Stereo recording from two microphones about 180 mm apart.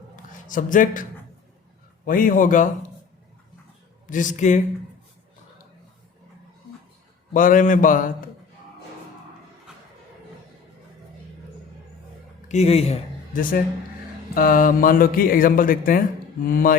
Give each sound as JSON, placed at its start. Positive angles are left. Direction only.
{"t": 0.4, "sound": "speech", "side_deg": 45}
{"t": 2.0, "sound": "speech", "side_deg": 50}
{"t": 4.0, "sound": "speech", "side_deg": 45}
{"t": 7.3, "sound": "speech", "side_deg": 50}
{"t": 12.5, "sound": "speech", "side_deg": 35}
{"t": 14.3, "sound": "speech", "side_deg": 50}